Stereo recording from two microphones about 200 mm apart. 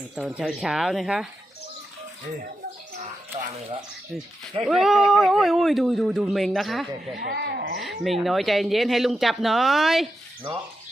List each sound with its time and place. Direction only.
0.2 s speech: 5° right (ahead or behind)
4.6 s speech: centre (ahead or behind)
7.2 s speech: 55° right (ahead or behind)
7.8 s speech: centre (ahead or behind)